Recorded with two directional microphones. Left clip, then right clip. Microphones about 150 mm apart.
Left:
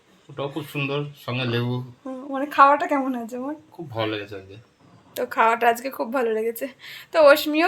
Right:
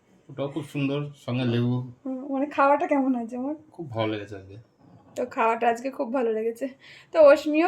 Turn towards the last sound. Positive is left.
turn(degrees=0)  # may be behind; listen again after turning